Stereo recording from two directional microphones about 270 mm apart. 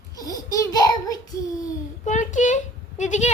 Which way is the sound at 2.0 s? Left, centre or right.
Left.